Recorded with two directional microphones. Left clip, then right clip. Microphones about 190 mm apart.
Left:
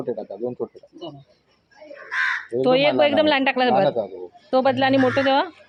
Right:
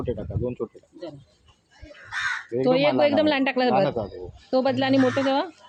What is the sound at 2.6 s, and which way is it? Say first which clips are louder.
Speech: left 3 dB; 15° right (ahead or behind).